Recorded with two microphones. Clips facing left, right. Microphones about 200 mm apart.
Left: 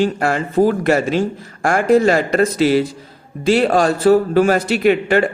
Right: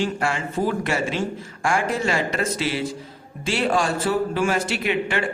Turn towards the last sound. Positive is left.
turn(degrees=40)  # may be behind; listen again after turning